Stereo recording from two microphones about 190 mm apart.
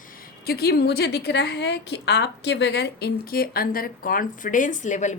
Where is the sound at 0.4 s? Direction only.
55° left (ahead or behind).